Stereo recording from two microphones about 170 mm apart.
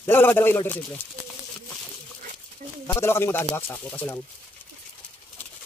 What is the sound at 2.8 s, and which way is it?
Speech, 15° left (ahead or behind).